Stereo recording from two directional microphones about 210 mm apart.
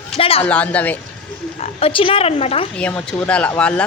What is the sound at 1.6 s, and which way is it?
Speech, 30° left (ahead or behind).